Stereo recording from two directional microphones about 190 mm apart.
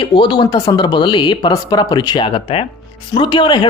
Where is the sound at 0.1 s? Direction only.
25° left (ahead or behind).